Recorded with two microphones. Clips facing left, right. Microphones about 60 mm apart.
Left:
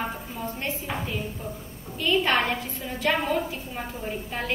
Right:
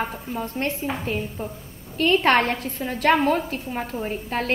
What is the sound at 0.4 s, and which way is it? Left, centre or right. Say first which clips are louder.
Speech: right 5 dB; right.